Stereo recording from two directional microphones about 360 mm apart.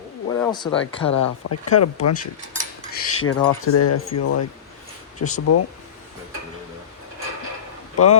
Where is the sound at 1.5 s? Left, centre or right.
Left.